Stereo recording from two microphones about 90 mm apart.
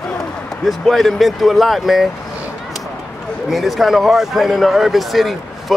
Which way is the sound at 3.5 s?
Centre (ahead or behind).